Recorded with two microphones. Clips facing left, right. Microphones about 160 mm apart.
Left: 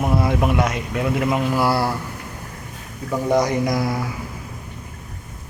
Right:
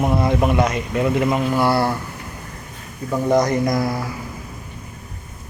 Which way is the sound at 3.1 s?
Centre (ahead or behind).